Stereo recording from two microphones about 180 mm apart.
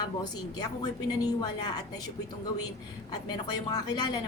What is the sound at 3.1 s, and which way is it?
A woman's voice, 25° left (ahead or behind).